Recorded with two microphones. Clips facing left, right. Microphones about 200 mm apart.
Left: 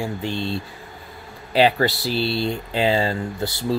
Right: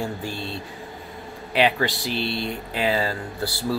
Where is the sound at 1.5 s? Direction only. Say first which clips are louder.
Left 4 dB; 35° left (ahead or behind).